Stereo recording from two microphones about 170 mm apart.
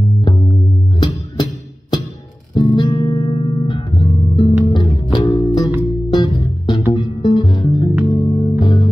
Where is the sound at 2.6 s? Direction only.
30° left (ahead or behind).